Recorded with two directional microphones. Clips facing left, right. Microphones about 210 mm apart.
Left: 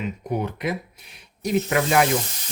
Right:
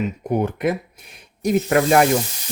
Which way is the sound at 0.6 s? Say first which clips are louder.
Right 6 dB; 50° right (ahead or behind).